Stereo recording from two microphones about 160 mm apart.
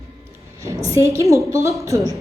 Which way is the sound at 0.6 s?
20° right (ahead or behind).